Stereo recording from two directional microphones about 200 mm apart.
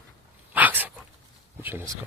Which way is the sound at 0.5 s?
10° right (ahead or behind).